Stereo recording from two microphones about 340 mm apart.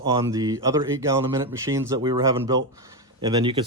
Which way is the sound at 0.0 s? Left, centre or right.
Centre.